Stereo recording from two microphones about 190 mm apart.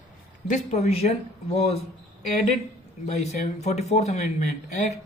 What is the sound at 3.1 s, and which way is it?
Speech, 35° left (ahead or behind).